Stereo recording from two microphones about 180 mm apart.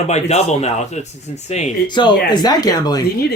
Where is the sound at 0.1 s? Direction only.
35° left (ahead or behind).